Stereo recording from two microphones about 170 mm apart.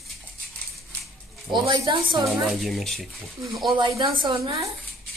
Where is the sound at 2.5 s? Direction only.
Centre (ahead or behind).